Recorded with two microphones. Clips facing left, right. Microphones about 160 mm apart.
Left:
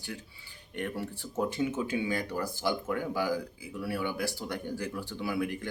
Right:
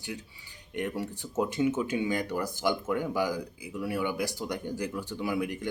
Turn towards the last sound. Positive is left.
turn(degrees=-15)  # may be behind; listen again after turning